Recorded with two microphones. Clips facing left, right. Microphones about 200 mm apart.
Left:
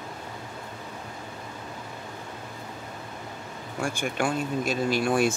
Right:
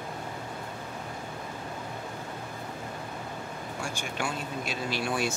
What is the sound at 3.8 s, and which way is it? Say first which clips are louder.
Speech: left 8 dB; 55° left (ahead or behind).